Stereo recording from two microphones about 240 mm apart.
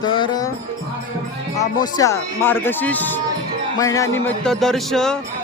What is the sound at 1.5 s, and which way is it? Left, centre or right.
A man's voice, centre.